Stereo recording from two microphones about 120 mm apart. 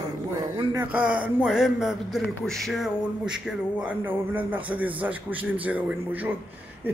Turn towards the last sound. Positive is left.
turn(degrees=-10)  # may be behind; listen again after turning